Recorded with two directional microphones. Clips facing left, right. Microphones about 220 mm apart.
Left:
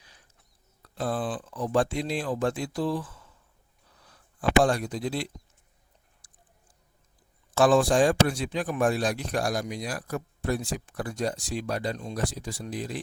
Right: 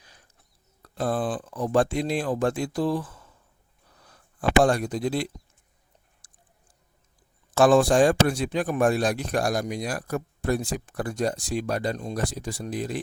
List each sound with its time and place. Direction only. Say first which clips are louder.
0.8 s speech: right 3 dB; 45° right (ahead or behind)
7.5 s speech: right 3 dB; 50° right (ahead or behind)